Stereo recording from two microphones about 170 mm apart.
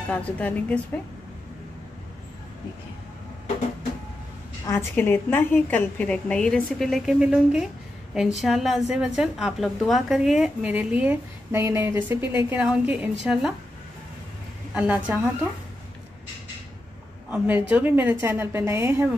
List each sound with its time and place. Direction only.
0.1 s a woman's voice: 10° left (ahead or behind)
4.6 s a woman's voice: 15° left (ahead or behind); by 13.6 s centre (ahead or behind)
14.7 s a woman's voice: 5° right (ahead or behind)
17.3 s a woman's voice: 10° right (ahead or behind)